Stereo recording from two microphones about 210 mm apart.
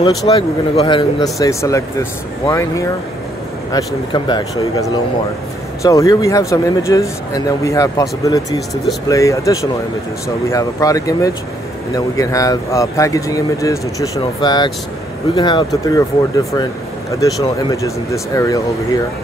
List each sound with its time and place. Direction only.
0.2 s speech: 15° left (ahead or behind)